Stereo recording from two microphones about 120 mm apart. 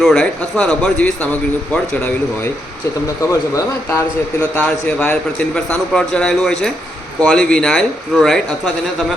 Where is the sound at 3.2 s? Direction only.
25° left (ahead or behind).